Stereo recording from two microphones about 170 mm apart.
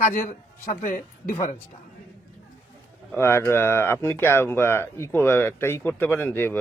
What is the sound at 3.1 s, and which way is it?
Speech, 15° left (ahead or behind).